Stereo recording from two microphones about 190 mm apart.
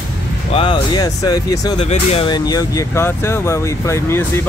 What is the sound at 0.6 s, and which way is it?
Speech, 25° left (ahead or behind).